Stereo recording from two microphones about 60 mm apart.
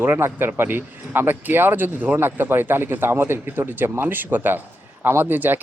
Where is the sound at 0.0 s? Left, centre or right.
Right.